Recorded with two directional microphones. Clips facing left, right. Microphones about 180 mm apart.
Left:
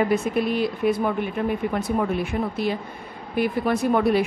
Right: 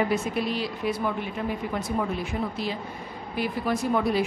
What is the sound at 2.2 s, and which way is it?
Speech, 60° left (ahead or behind).